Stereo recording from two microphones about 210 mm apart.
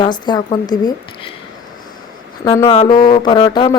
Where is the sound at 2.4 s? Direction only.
20° left (ahead or behind).